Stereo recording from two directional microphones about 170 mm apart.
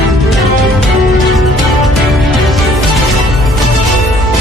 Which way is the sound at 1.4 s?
Centre (ahead or behind).